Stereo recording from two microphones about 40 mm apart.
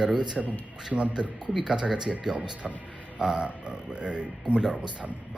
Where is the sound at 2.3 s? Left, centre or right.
Centre.